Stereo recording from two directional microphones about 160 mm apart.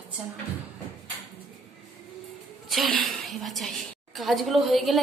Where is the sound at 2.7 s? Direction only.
Centre (ahead or behind).